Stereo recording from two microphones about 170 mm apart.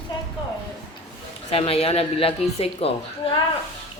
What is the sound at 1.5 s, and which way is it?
Speech, 35° left (ahead or behind).